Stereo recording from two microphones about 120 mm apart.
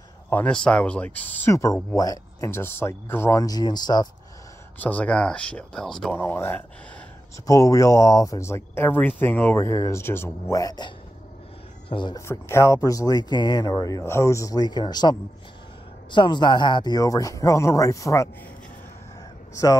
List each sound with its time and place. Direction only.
0.3 s speech: 10° left (ahead or behind); by 2.5 s 30° left (ahead or behind)
2.5 s speech: 20° left (ahead or behind); by 4.1 s 35° left (ahead or behind)
4.7 s speech: 15° left (ahead or behind)
6.1 s speech: 20° left (ahead or behind)
7.4 s speech: 30° left (ahead or behind)
11.9 s speech: 40° left (ahead or behind)
12.3 s speech: 20° left (ahead or behind)
19.5 s speech: 30° left (ahead or behind)